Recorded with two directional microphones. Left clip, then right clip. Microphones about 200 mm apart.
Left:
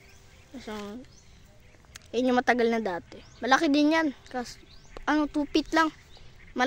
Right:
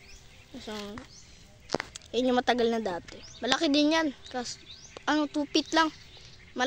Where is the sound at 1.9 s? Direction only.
10° left (ahead or behind).